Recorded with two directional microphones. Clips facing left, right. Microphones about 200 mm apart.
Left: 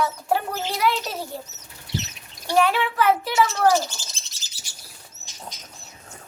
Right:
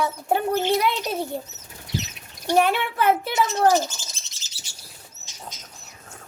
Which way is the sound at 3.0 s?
50° right (ahead or behind).